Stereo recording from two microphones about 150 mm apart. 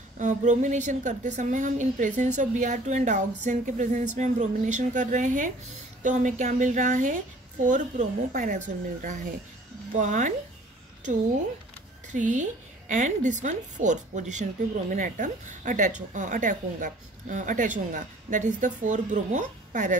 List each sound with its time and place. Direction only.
0.2 s a woman's voice: 55° right (ahead or behind)
12.1 s a woman's voice: 55° right (ahead or behind)